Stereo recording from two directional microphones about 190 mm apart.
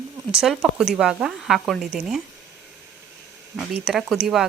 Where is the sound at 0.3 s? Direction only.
5° right (ahead or behind).